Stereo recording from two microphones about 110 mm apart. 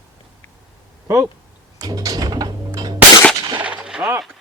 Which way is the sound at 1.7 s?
30° right (ahead or behind).